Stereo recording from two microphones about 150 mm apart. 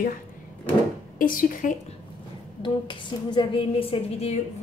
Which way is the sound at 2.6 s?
30° left (ahead or behind).